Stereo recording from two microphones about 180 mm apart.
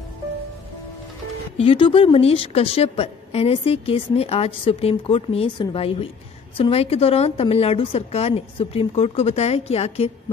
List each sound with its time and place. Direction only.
1.6 s a woman's voice: 30° left (ahead or behind)